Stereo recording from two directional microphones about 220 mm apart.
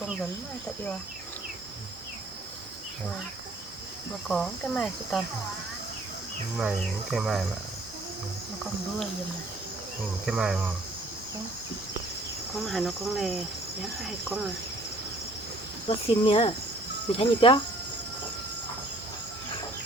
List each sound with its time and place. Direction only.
4.3 s speech: 5° left (ahead or behind)
6.6 s speech: centre (ahead or behind)
10.2 s speech: 5° right (ahead or behind)
12.5 s speech: centre (ahead or behind)
16.2 s speech: 25° left (ahead or behind)